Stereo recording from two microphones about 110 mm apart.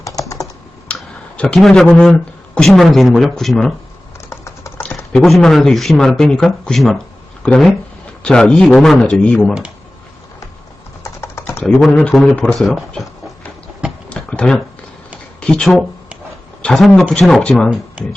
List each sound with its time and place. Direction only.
0.0 s typing: 30° left (ahead or behind)
0.9 s speech: 5° left (ahead or behind)
4.2 s typing: 25° left (ahead or behind)
5.1 s speech: 5° left (ahead or behind)
11.0 s typing: 25° left (ahead or behind)
11.6 s speech: 5° left (ahead or behind)
14.1 s a sound: 10° left (ahead or behind)
15.4 s speech: 10° left (ahead or behind)